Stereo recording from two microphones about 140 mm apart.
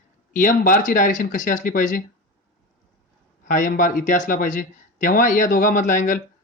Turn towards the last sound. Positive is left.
turn(degrees=65)  # may be behind; listen again after turning